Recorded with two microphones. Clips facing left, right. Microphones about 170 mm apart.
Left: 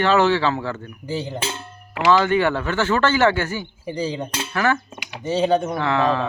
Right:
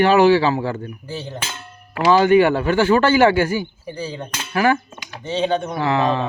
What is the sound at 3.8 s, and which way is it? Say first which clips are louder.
Speech: left 3 dB; 10° left (ahead or behind).